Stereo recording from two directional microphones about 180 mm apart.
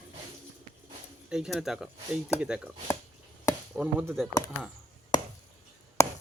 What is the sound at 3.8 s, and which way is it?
Speech, 5° right (ahead or behind).